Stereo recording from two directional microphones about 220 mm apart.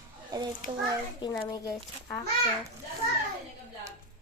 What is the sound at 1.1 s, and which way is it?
Speech, 20° left (ahead or behind).